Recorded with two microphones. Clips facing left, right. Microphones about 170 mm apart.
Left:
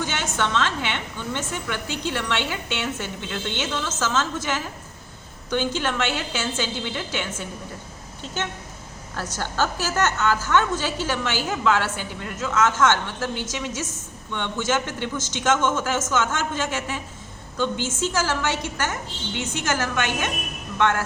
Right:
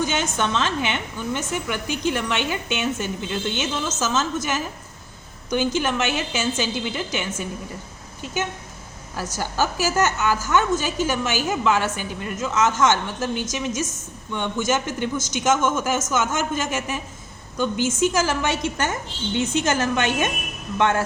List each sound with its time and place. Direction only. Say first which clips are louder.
0.0 s a woman's voice: right 3 dB; 15° right (ahead or behind)